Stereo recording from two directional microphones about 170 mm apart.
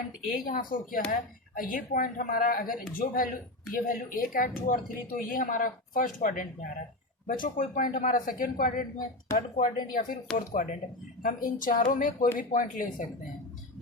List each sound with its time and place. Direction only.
0.4 s a woman's voice: 55° left (ahead or behind)